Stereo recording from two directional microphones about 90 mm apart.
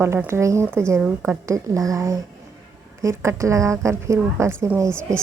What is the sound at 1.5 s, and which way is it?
Speech, 40° right (ahead or behind).